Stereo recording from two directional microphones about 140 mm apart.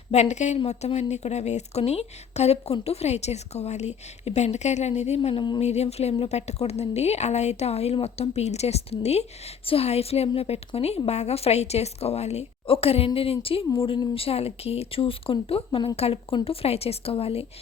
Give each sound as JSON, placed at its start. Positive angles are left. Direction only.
{"t": 0.1, "sound": "a woman's voice", "side_deg": 55}